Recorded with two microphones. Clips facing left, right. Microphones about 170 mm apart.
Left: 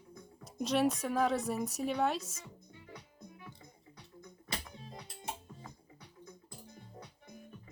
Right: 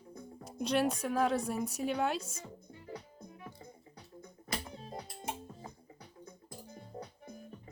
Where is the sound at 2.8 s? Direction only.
35° right (ahead or behind).